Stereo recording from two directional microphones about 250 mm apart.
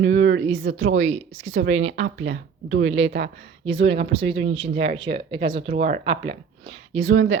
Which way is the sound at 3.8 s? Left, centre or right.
Right.